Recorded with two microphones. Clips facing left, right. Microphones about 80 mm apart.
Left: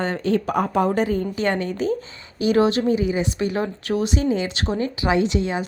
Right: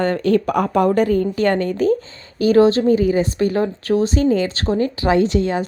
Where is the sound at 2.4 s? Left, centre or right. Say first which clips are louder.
Right 5 dB; right.